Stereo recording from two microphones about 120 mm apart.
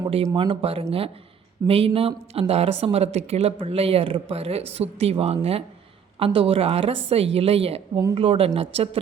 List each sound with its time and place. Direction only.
0.3 s speech: 50° right (ahead or behind)